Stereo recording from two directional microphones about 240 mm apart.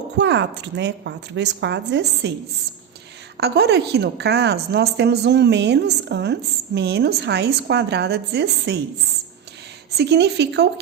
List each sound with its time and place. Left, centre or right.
0.2 s a woman's voice: right
3.3 s a woman's voice: right
10.0 s a woman's voice: right